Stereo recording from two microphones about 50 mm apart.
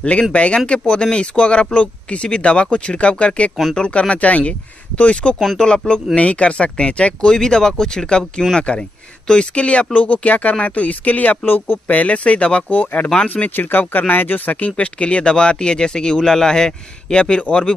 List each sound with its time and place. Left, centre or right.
0.0 s speech: left; by 8.5 s centre
8.5 s speech: centre; by 11.8 s left
11.9 s speech: left
12.6 s speech: left; by 17.7 s centre